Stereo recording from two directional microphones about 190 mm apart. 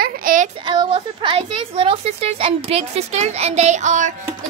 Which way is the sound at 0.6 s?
25° right (ahead or behind).